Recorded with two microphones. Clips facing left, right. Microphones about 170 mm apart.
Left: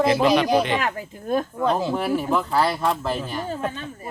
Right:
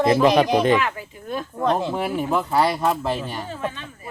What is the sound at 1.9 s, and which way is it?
Speech, 15° right (ahead or behind).